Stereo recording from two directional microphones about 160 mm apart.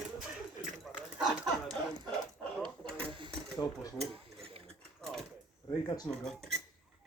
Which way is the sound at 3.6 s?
20° left (ahead or behind).